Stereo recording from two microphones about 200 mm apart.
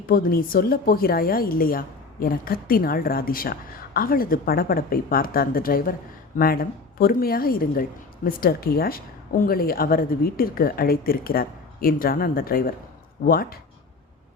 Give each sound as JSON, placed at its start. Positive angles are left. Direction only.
{"t": 0.1, "sound": "a woman's voice", "side_deg": 45}